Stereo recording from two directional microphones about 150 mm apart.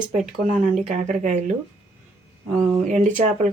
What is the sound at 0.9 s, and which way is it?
Speech, 55° right (ahead or behind).